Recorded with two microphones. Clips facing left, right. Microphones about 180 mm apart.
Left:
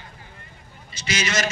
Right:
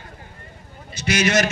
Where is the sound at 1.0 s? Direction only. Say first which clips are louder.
Right 7 dB; 60° right (ahead or behind).